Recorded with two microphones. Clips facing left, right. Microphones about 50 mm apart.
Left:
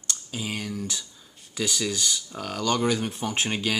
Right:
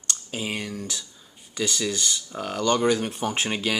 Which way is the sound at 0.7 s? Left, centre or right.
Centre.